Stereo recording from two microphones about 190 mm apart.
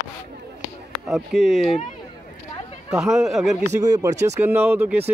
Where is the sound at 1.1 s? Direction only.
Centre (ahead or behind).